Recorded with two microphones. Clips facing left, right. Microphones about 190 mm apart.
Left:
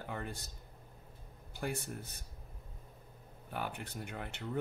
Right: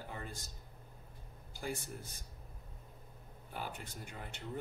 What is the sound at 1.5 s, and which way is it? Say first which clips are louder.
Speech: left 3 dB; 60° left (ahead or behind).